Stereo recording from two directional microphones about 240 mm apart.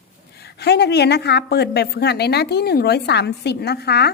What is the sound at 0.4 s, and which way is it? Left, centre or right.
A woman's voice, left.